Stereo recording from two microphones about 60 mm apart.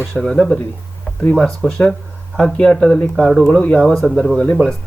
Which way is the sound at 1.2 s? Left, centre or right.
Centre.